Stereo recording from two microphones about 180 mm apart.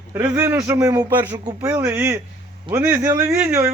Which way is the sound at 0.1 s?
10° right (ahead or behind).